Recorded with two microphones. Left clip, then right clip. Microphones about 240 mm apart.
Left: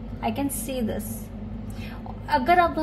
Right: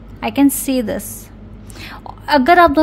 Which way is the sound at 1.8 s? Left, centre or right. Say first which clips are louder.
Right 11 dB; right.